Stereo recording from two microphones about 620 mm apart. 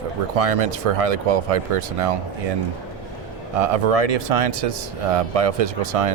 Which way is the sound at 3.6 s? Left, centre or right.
Right.